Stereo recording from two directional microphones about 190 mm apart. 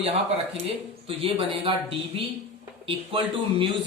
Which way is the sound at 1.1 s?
30° right (ahead or behind).